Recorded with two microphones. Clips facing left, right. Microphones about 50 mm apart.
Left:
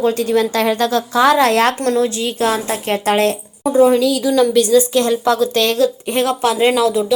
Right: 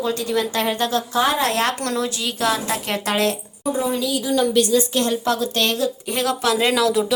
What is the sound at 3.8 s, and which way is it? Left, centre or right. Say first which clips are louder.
Speech: left 13 dB; left.